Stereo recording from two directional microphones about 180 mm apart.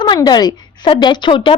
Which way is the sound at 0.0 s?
25° left (ahead or behind).